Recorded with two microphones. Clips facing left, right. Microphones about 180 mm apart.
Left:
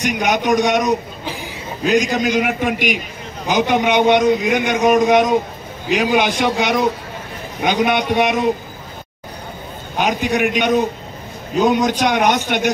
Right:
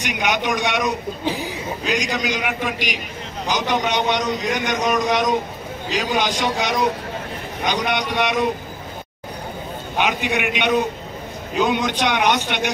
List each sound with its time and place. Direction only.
0.0 s speech: 45° left (ahead or behind)
9.9 s a man's voice: 40° left (ahead or behind)